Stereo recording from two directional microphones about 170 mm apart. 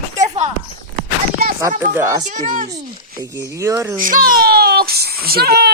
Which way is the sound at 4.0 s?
55° right (ahead or behind).